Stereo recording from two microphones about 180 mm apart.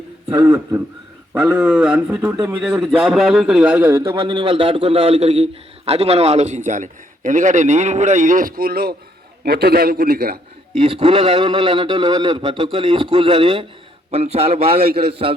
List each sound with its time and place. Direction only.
0.3 s a man's voice: 20° right (ahead or behind); by 10.3 s 60° right (ahead or behind)
10.8 s a man's voice: 30° right (ahead or behind)
14.8 s a man's voice: 60° right (ahead or behind)